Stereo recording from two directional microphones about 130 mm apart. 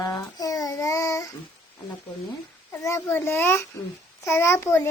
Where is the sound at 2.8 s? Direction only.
20° left (ahead or behind).